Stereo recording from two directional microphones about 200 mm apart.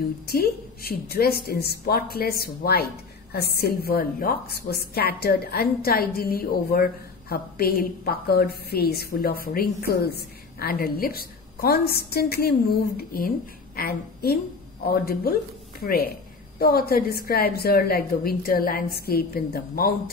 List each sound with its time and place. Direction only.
0.3 s a woman's voice: 50° left (ahead or behind)